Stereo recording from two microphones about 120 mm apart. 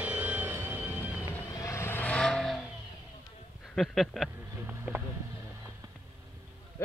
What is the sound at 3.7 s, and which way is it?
Speech, centre (ahead or behind).